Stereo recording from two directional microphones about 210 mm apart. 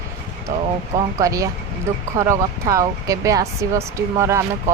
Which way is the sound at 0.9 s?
15° right (ahead or behind).